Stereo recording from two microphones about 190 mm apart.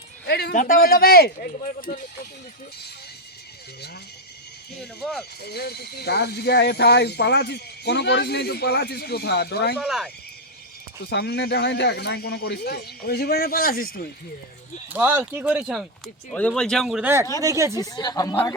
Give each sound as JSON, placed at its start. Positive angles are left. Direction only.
{"t": 0.3, "sound": "speech", "side_deg": 60}
{"t": 4.8, "sound": "speech", "side_deg": 5}
{"t": 5.4, "sound": "speech", "side_deg": 60}
{"t": 9.8, "sound": "speech", "side_deg": 0}
{"t": 11.1, "sound": "speech", "side_deg": 60}
{"t": 14.8, "sound": "speech", "side_deg": -10}
{"t": 17.4, "sound": "speech", "side_deg": -15}
{"t": 17.7, "sound": "speech", "side_deg": 20}